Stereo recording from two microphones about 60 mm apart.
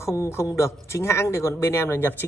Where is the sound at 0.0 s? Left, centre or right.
Left.